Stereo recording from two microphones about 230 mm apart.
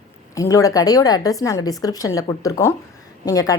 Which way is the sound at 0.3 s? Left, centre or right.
Centre.